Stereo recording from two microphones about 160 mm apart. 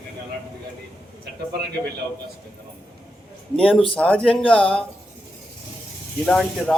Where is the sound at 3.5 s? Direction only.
5° left (ahead or behind).